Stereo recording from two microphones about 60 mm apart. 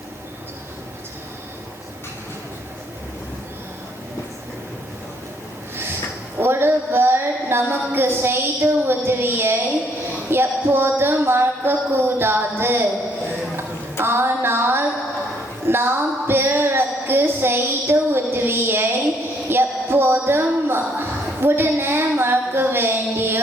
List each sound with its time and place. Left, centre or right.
6.4 s a woman's voice: right
14.0 s a woman's voice: right